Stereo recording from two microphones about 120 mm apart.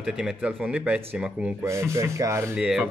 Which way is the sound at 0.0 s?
10° right (ahead or behind).